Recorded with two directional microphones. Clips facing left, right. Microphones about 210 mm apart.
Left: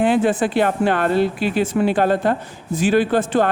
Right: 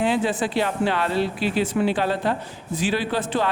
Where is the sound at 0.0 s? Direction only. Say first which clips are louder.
Left 5 dB; 55° left (ahead or behind).